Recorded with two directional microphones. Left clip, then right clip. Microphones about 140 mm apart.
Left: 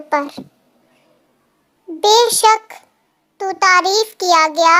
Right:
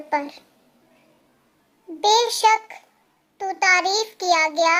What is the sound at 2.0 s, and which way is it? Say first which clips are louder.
Child singing: left 6 dB; 35° left (ahead or behind).